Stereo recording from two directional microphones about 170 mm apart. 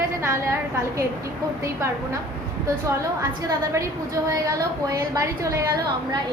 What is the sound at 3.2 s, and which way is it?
A woman's voice, 20° right (ahead or behind).